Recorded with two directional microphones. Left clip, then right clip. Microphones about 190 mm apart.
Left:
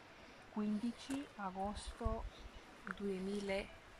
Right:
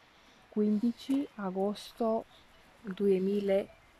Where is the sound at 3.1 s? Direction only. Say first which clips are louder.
Right 14 dB; 45° right (ahead or behind).